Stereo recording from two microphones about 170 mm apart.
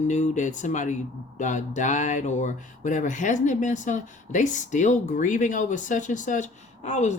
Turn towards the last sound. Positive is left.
turn(degrees=45)  # may be behind; listen again after turning